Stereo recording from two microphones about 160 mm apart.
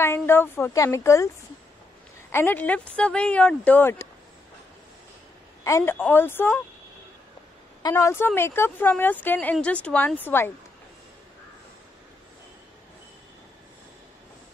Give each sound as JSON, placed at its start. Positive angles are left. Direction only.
{"t": 0.0, "sound": "speech", "side_deg": 15}
{"t": 2.3, "sound": "speech", "side_deg": 10}
{"t": 5.6, "sound": "a woman's voice", "side_deg": 20}
{"t": 7.9, "sound": "speech", "side_deg": 15}